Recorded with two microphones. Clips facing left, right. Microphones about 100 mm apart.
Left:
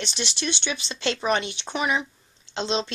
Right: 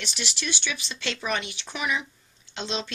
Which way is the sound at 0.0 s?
25° left (ahead or behind).